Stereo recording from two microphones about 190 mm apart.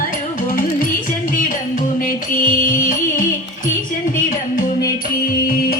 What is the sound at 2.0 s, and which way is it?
Music, 45° left (ahead or behind).